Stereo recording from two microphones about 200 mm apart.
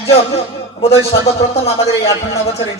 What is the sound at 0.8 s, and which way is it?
A man's voice, 30° left (ahead or behind).